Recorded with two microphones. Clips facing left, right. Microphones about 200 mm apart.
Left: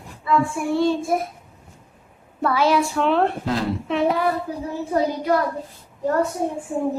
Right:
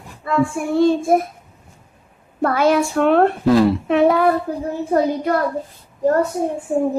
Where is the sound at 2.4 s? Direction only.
50° right (ahead or behind).